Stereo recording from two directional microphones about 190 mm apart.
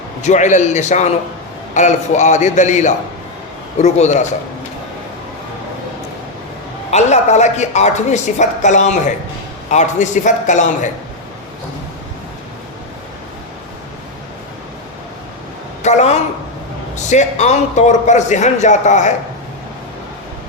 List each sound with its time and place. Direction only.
0.2 s a woman's voice: 40° left (ahead or behind)
6.9 s a woman's voice: 35° left (ahead or behind)
15.8 s a woman's voice: 35° left (ahead or behind)